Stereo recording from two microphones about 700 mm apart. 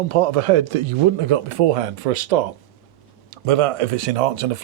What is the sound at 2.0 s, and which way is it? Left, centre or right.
Speech, right.